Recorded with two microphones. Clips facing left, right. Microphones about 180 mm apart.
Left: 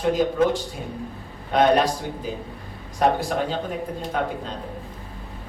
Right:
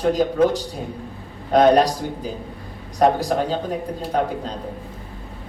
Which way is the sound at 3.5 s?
40° right (ahead or behind).